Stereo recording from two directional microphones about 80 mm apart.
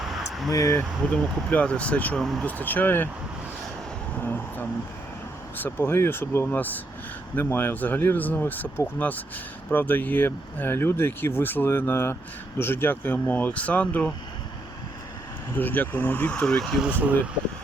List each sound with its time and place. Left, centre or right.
0.0 s a sound: centre
0.5 s speech: left
0.8 s speech: centre
2.1 s speech: centre
2.4 s speech: centre
4.2 s speech: left
15.5 s speech: left
16.8 s speech: right